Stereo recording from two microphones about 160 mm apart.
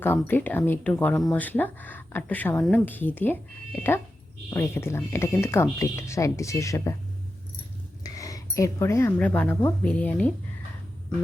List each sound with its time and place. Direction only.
0.0 s speech: 15° left (ahead or behind)
4.5 s speech: 15° left (ahead or behind)
8.0 s speech: 20° left (ahead or behind)